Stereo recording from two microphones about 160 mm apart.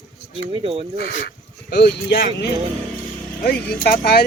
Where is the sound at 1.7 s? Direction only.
90° left.